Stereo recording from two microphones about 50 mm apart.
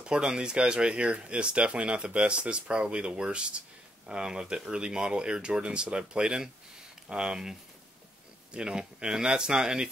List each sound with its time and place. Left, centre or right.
0.0 s speech: centre